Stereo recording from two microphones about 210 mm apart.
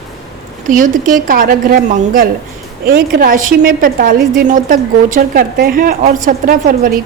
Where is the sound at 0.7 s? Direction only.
40° right (ahead or behind).